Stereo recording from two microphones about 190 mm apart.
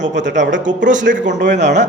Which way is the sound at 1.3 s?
65° right (ahead or behind).